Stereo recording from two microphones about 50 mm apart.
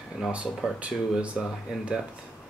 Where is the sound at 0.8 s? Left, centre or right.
Right.